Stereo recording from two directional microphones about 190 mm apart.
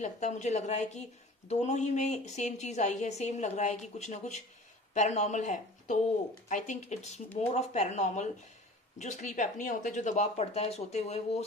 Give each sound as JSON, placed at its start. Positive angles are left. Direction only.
{"t": 0.0, "sound": "a woman's voice", "side_deg": 40}